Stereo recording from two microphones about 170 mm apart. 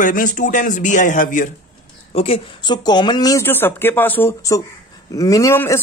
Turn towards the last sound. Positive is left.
turn(degrees=15)  # may be behind; listen again after turning